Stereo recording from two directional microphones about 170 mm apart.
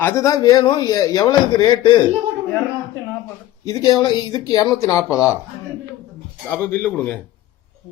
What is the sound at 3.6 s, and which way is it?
Speech, 20° left (ahead or behind).